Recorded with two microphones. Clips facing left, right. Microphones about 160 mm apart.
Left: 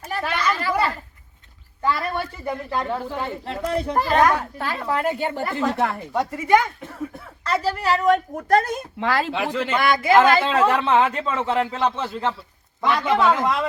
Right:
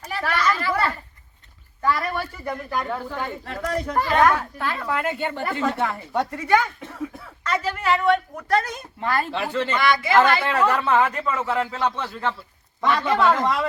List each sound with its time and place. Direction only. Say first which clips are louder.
0.2 s children playing: right 1 dB; 20° left (ahead or behind)
0.7 s a sound: left 1 dB; 15° left (ahead or behind)
1.8 s a man's voice: even; 20° left (ahead or behind)
5.4 s speech: even; 5° left (ahead or behind)
7.4 s a woman's voice: left 2 dB; 35° left (ahead or behind); by 8.9 s 50° left (ahead or behind)
9.0 s speech: left 1 dB; 90° left
9.3 s speech: left 1 dB; 15° left (ahead or behind)
9.7 s speech: left 1 dB; 50° left (ahead or behind)
10.4 s a man's voice: left 2 dB; 20° left (ahead or behind)
12.8 s speech: left 1 dB; 10° left (ahead or behind)